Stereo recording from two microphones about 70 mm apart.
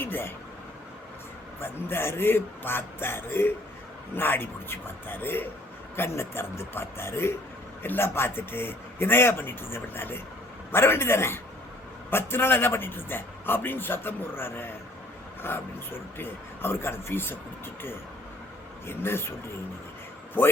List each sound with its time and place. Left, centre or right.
0.0 s a man's voice: left
1.6 s a man's voice: left
18.9 s a man's voice: left
20.4 s a man's voice: left